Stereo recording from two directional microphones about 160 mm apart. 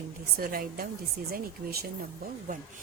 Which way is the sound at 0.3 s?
65° right (ahead or behind).